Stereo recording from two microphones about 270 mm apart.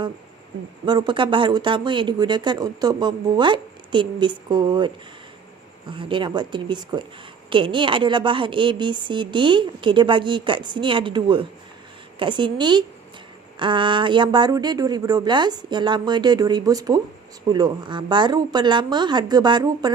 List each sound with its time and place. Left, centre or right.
0.9 s speech: centre
5.9 s speech: centre